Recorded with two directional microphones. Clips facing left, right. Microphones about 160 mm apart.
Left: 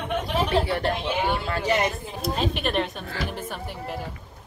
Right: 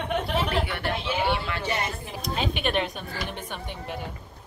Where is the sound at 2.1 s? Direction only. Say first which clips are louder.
Left 1 dB; centre (ahead or behind).